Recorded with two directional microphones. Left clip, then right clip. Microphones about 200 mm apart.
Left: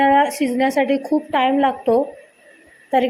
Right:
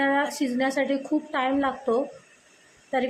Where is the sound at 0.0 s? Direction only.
15° left (ahead or behind).